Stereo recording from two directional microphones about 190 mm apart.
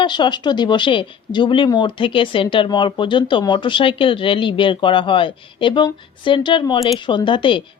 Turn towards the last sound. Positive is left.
turn(degrees=25)  # may be behind; listen again after turning